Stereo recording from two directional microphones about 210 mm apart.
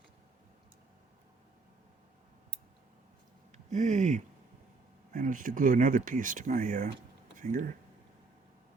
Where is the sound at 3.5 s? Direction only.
35° right (ahead or behind).